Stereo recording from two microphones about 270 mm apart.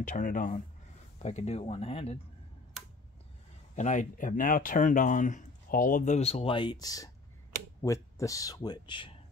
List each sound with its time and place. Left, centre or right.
0.0 s speech: left
3.7 s speech: left